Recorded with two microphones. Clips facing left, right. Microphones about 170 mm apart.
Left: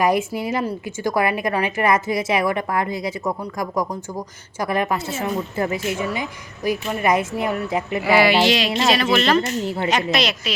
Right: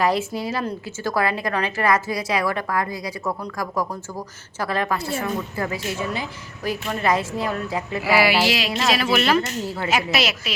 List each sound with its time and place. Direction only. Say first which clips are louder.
0.0 s a woman's voice: left 2 dB; 15° left (ahead or behind)
4.6 s a woman's voice: left 2 dB; 20° left (ahead or behind)
8.0 s a sound: left 3 dB; 5° right (ahead or behind)
9.1 s speech: even; 10° right (ahead or behind)
9.6 s a woman's voice: left 4 dB; 25° left (ahead or behind)
9.9 s a sound: even; 5° right (ahead or behind)